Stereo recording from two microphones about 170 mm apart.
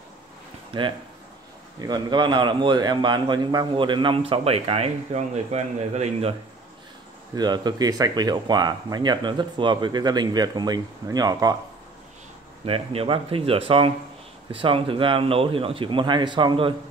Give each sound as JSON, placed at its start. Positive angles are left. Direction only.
{"t": 0.7, "sound": "a man's voice", "side_deg": -30}
{"t": 7.3, "sound": "a man's voice", "side_deg": -25}
{"t": 12.6, "sound": "speech", "side_deg": -35}